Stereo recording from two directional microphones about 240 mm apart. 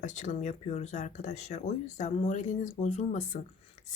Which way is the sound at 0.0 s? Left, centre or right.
Left.